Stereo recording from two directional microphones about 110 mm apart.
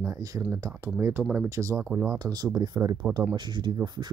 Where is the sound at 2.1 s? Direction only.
35° right (ahead or behind).